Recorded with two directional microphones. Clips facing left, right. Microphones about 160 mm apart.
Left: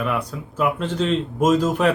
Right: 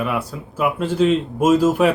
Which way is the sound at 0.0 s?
5° right (ahead or behind).